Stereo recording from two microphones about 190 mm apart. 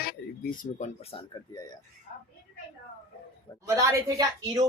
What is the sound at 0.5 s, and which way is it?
Speech, 45° left (ahead or behind).